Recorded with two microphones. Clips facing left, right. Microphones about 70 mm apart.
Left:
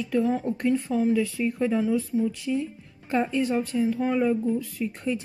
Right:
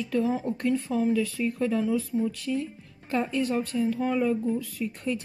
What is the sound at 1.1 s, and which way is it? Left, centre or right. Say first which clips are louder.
Speech: left 2 dB; centre.